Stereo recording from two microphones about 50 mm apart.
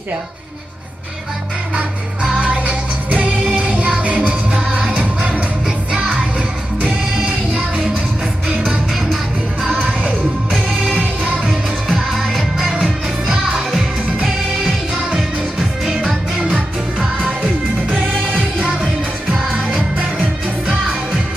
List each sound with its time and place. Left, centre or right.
2.4 s music: right
8.9 s music: centre
9.8 s music: right
11.9 s music: centre
12.8 s music: centre
16.4 s music: right